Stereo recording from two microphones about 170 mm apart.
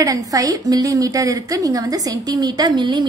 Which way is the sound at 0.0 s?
20° right (ahead or behind).